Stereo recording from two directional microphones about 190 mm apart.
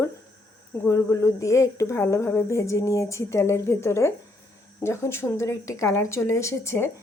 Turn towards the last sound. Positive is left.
turn(degrees=15)  # may be behind; listen again after turning